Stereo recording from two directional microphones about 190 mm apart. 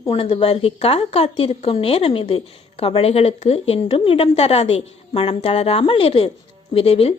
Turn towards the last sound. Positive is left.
turn(degrees=30)  # may be behind; listen again after turning